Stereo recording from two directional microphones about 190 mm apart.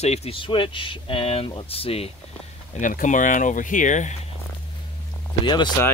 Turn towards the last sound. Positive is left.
turn(degrees=25)  # may be behind; listen again after turning